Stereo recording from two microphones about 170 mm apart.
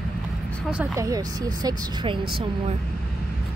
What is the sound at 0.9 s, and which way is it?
Speech, 20° right (ahead or behind).